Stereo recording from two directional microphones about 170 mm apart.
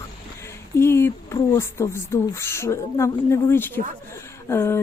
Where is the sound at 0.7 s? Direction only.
15° left (ahead or behind).